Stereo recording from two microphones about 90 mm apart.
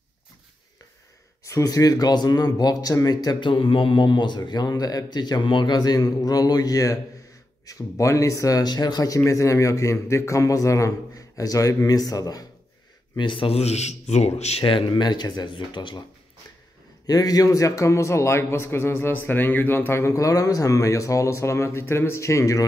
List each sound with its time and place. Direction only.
1.4 s a man's voice: 40° left (ahead or behind)
3.4 s a man's voice: 70° left (ahead or behind); by 12.4 s 45° left (ahead or behind)
13.1 s speech: 65° left (ahead or behind)
14.6 s speech: 65° left (ahead or behind)
17.0 s a man's voice: 45° left (ahead or behind)